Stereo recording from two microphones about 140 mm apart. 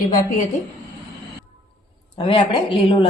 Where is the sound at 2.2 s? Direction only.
40° left (ahead or behind).